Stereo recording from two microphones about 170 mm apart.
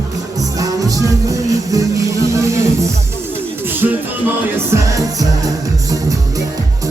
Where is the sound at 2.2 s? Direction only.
20° right (ahead or behind).